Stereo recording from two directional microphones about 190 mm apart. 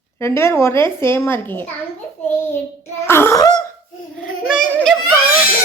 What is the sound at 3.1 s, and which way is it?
Speech, 15° left (ahead or behind).